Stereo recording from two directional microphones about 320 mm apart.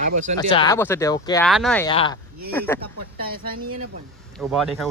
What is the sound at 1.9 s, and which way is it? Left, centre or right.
Speech, centre.